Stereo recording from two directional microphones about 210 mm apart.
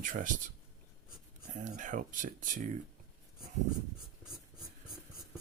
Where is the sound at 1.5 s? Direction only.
35° right (ahead or behind).